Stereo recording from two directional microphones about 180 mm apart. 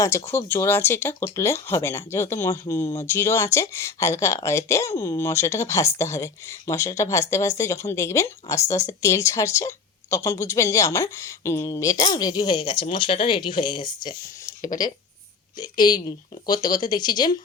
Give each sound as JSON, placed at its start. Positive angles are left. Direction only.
{"t": 0.3, "sound": "speech", "side_deg": 10}